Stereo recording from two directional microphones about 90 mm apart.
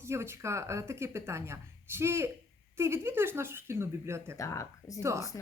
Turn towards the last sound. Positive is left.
turn(degrees=-30)  # may be behind; listen again after turning